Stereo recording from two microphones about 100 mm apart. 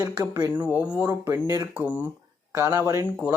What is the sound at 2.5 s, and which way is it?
Speech, 25° right (ahead or behind).